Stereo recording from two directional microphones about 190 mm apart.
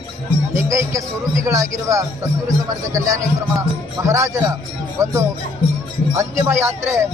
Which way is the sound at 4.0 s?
15° right (ahead or behind).